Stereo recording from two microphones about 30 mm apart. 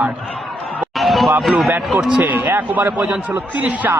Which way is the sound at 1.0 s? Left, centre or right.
Centre.